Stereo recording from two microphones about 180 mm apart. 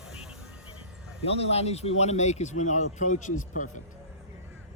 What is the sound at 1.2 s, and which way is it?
Speech, 35° left (ahead or behind).